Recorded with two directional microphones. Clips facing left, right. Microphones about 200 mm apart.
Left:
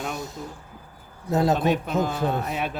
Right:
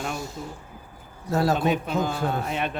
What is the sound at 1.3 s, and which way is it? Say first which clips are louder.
Speech: left 1 dB; 20° left (ahead or behind).